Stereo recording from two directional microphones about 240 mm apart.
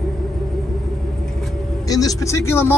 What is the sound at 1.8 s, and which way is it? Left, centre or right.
Speech, centre.